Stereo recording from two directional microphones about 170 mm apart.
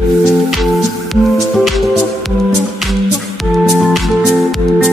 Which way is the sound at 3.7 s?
Centre (ahead or behind).